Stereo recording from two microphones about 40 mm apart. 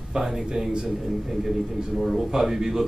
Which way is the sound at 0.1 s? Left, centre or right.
Centre.